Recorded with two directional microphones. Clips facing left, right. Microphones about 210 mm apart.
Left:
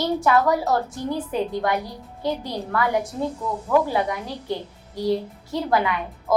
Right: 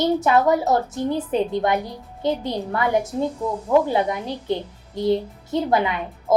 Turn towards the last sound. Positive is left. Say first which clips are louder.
# right 2 dB
turn(degrees=-20)  # may be behind; listen again after turning